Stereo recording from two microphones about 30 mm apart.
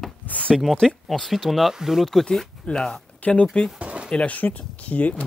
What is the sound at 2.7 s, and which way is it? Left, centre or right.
Speech, left.